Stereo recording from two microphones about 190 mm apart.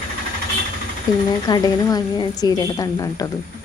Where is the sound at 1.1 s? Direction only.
20° left (ahead or behind).